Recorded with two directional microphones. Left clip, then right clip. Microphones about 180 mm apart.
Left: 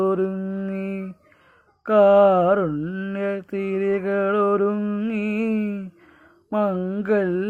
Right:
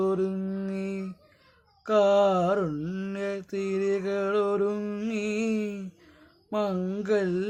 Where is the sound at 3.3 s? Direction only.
40° left (ahead or behind).